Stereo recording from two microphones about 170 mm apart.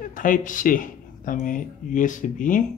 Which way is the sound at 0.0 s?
50° left (ahead or behind).